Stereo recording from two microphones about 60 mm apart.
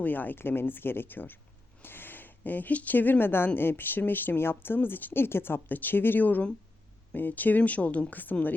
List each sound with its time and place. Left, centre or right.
0.0 s speech: left